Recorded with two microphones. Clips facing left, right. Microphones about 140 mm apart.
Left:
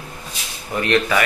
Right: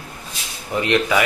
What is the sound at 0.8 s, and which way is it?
Speech, 15° right (ahead or behind).